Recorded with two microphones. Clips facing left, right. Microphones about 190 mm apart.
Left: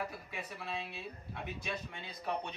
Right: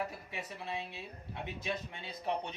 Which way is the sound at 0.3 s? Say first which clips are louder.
Right 1 dB; 20° right (ahead or behind).